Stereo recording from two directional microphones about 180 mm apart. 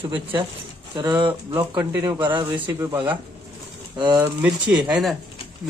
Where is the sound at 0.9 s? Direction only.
25° right (ahead or behind).